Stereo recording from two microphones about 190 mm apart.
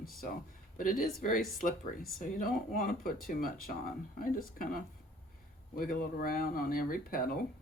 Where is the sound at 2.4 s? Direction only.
50° left (ahead or behind).